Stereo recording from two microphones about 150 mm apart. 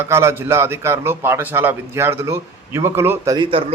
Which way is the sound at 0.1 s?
20° right (ahead or behind).